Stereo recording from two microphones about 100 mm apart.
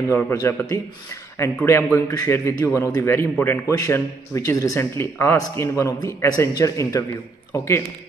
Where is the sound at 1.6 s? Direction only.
20° left (ahead or behind).